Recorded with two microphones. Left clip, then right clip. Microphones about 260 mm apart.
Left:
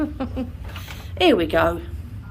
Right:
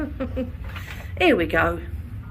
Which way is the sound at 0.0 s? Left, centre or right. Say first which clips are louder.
Left 2 dB; centre.